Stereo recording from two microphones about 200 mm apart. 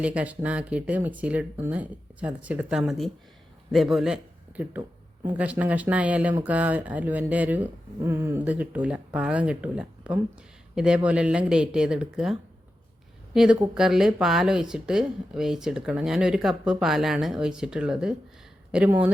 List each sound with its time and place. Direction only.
0.0 s a man's voice: 5° right (ahead or behind)